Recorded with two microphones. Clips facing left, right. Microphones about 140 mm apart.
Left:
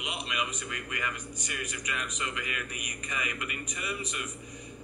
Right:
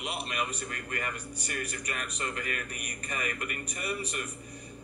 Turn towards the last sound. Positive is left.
turn(degrees=-45)  # may be behind; listen again after turning